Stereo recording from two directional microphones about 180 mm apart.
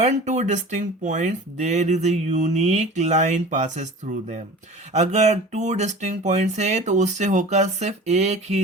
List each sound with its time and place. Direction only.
0.0 s speech: 40° right (ahead or behind)